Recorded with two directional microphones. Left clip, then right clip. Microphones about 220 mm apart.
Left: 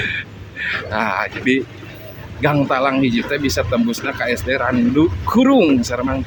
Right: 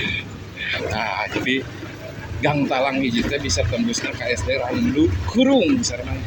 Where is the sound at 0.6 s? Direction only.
30° left (ahead or behind).